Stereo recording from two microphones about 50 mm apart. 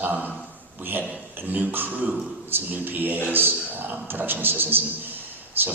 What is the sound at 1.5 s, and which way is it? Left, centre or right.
Beatboxing, right.